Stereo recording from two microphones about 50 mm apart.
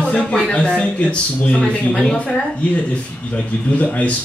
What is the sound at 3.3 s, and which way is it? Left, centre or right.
Speech, left.